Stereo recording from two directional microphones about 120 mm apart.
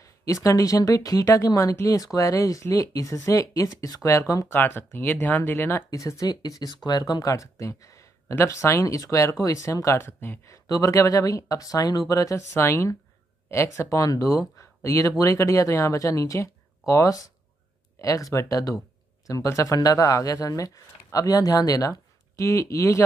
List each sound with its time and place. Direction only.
0.0 s speech: 25° left (ahead or behind)
4.6 s speech: 15° left (ahead or behind)